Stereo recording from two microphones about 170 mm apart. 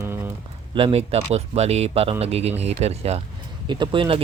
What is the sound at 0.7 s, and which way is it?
Speech, 35° right (ahead or behind).